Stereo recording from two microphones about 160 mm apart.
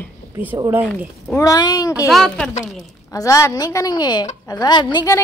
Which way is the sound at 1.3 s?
20° left (ahead or behind).